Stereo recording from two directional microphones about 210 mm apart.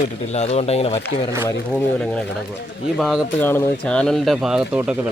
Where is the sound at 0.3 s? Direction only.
30° left (ahead or behind).